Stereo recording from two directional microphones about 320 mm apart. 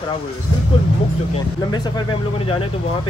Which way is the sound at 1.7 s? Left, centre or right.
Centre.